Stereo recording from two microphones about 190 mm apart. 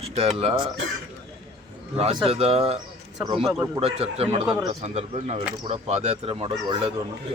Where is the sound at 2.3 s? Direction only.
35° right (ahead or behind).